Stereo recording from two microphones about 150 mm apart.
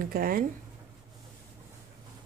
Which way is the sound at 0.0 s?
80° right.